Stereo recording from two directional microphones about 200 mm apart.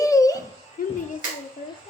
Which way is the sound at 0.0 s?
15° left (ahead or behind).